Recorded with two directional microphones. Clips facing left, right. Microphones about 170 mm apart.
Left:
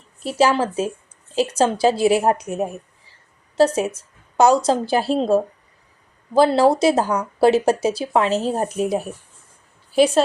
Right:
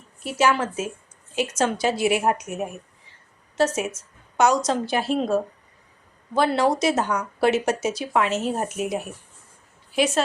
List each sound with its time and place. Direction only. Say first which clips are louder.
0.2 s speech: left 4 dB; 30° left (ahead or behind)